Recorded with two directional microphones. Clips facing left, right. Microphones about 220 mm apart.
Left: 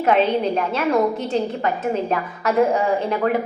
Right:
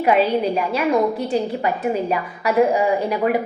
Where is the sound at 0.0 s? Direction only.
5° right (ahead or behind).